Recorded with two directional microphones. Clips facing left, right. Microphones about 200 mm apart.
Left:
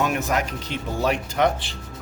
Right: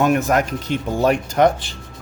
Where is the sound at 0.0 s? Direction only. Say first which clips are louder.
Right 6 dB; 50° right (ahead or behind).